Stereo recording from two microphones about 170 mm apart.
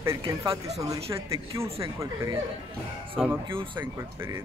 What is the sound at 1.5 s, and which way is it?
Speech, 15° right (ahead or behind).